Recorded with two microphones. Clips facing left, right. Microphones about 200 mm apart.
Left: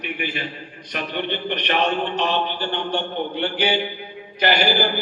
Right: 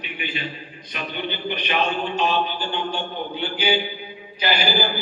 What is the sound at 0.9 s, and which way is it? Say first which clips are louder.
A man's voice: left 3 dB; 75° left (ahead or behind).